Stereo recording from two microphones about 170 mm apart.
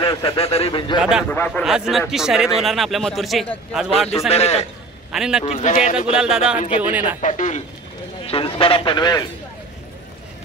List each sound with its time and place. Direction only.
0.0 s a man's voice: 30° left (ahead or behind)
0.9 s a man's voice: 5° right (ahead or behind)
1.2 s a man's voice: 10° left (ahead or behind)
1.6 s a man's voice: centre (ahead or behind)
4.3 s a man's voice: 40° left (ahead or behind)
5.1 s a man's voice: 5° right (ahead or behind)
5.4 s a man's voice: 35° left (ahead or behind)
5.7 s a man's voice: 50° left (ahead or behind)
6.1 s a man's voice: 5° right (ahead or behind)
7.2 s a man's voice: 45° left (ahead or behind)
8.3 s speech: 35° left (ahead or behind)